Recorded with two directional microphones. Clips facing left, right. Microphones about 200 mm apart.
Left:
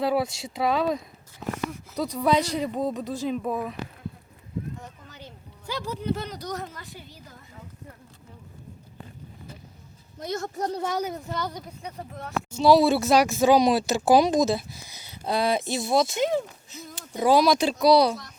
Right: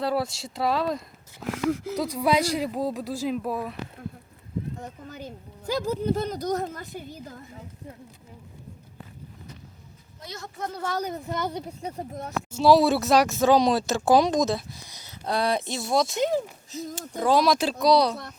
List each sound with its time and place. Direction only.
0.0 s speech: centre (ahead or behind)
1.5 s speech: 90° right
2.0 s speech: 10° right (ahead or behind)
4.8 s speech: 50° right (ahead or behind)
10.2 s a woman's voice: 50° left (ahead or behind)
10.8 s speech: 15° left (ahead or behind)
11.3 s a woman's voice: 20° right (ahead or behind)
12.5 s speech: centre (ahead or behind)
16.7 s speech: 40° right (ahead or behind)
17.2 s speech: 5° left (ahead or behind)